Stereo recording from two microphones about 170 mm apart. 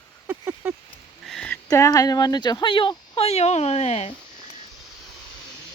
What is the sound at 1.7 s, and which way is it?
Speech, 20° left (ahead or behind).